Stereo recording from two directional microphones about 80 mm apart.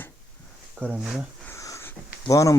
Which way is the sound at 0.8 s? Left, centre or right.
Centre.